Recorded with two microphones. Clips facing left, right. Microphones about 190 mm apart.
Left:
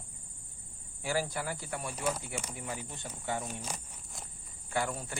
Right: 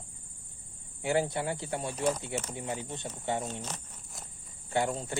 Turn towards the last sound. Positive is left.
turn(degrees=-25)  # may be behind; listen again after turning